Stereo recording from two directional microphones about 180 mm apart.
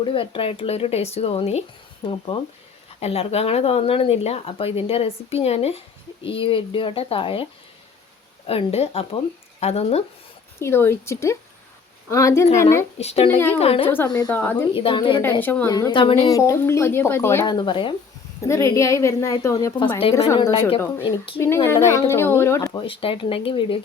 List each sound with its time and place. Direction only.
0.0 s speech: 30° left (ahead or behind)
8.4 s speech: 35° left (ahead or behind)
10.6 s speech: 15° left (ahead or behind)
13.0 s speech: 35° left (ahead or behind)
13.8 s speech: 10° left (ahead or behind)
14.7 s speech: 30° left (ahead or behind)
15.2 s speech: 10° left (ahead or behind)
15.7 s speech: 25° left (ahead or behind)
16.3 s speech: 15° left (ahead or behind)
17.4 s speech: 25° left (ahead or behind)
18.4 s speech: 15° left (ahead or behind)